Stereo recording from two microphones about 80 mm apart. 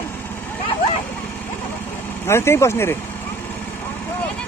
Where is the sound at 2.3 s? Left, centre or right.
Left.